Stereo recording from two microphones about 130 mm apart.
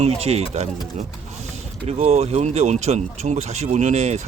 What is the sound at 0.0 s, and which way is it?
Speech, 55° right (ahead or behind).